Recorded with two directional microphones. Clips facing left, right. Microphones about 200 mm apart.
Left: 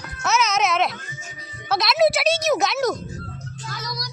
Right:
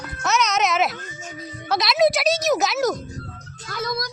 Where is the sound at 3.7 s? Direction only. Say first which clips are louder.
Right 8 dB; 55° right (ahead or behind).